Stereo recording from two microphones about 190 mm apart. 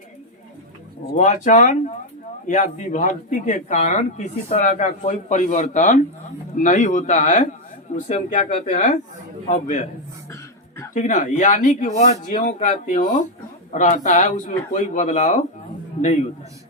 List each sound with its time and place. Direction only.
1.0 s speech: 40° left (ahead or behind)
10.9 s speech: 40° left (ahead or behind)